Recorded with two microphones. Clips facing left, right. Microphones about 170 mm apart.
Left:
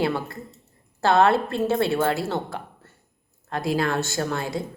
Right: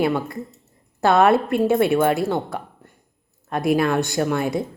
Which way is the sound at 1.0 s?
20° right (ahead or behind).